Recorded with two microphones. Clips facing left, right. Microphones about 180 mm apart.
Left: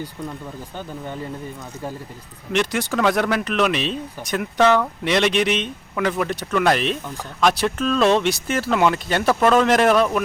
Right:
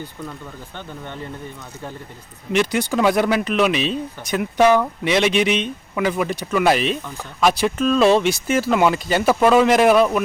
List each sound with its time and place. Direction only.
2.5 s speech: centre (ahead or behind)